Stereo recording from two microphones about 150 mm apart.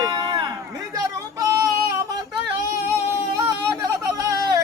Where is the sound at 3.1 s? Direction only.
20° right (ahead or behind).